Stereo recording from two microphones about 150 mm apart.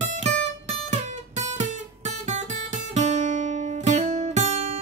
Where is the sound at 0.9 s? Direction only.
50° right (ahead or behind).